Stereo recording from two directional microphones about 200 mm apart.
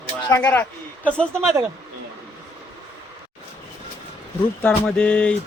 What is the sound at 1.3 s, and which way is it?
Speech, 15° right (ahead or behind).